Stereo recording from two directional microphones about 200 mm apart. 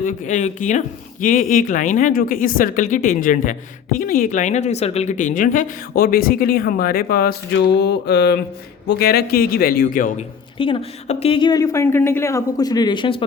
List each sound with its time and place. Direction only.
0.0 s speech: 35° left (ahead or behind)
7.8 s a sound: 55° left (ahead or behind)
8.9 s a man's voice: 50° left (ahead or behind)
10.6 s speech: 30° left (ahead or behind)